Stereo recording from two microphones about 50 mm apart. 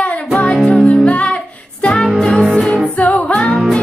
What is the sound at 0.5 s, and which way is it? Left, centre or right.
Music, centre.